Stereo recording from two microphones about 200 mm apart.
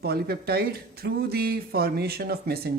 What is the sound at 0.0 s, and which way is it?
Speech, 50° right (ahead or behind).